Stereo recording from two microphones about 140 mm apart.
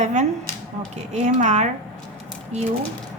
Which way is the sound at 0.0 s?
55° right (ahead or behind).